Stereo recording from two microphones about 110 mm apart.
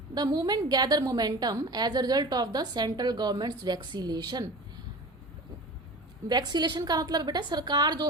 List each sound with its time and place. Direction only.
0.1 s a woman's voice: 35° right (ahead or behind)
6.2 s a woman's voice: 40° right (ahead or behind)